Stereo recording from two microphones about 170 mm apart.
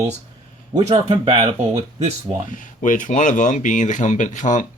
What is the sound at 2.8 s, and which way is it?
Speech, 50° left (ahead or behind).